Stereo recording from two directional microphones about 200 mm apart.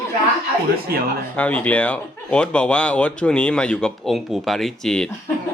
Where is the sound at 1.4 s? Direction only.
5° left (ahead or behind).